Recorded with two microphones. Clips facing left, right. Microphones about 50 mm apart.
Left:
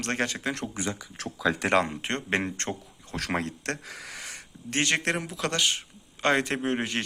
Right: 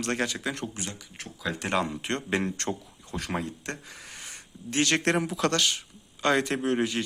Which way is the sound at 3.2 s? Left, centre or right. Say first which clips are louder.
Left 2 dB; left.